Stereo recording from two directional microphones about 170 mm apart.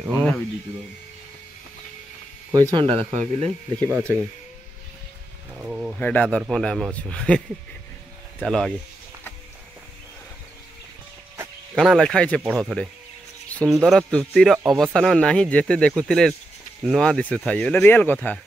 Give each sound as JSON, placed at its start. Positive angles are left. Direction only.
{"t": 0.0, "sound": "speech", "side_deg": 5}
{"t": 2.5, "sound": "speech", "side_deg": -30}
{"t": 5.5, "sound": "speech", "side_deg": -5}
{"t": 5.9, "sound": "speech", "side_deg": 10}
{"t": 11.7, "sound": "speech", "side_deg": 0}
{"t": 13.5, "sound": "a sound", "side_deg": 10}
{"t": 13.7, "sound": "speech", "side_deg": 0}